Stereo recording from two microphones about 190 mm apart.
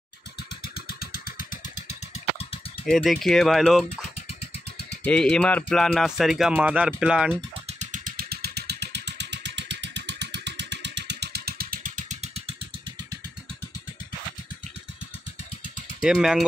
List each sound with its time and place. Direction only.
0.4 s vehicle: 55° left (ahead or behind)
1.9 s vehicle: 35° left (ahead or behind)
2.9 s speech: centre (ahead or behind)
5.0 s speech: 5° left (ahead or behind)
7.6 s vehicle: 40° right (ahead or behind)
16.0 s speech: 5° right (ahead or behind)